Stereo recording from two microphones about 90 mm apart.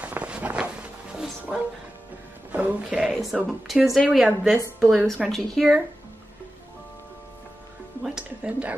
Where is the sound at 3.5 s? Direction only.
5° right (ahead or behind).